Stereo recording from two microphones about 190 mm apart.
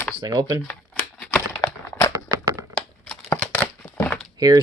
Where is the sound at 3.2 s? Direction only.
15° left (ahead or behind).